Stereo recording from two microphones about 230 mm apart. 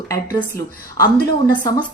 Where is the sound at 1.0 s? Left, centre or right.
Left.